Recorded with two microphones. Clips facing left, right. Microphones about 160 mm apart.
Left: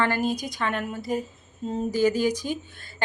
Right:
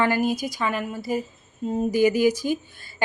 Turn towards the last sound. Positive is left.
turn(degrees=-5)  # may be behind; listen again after turning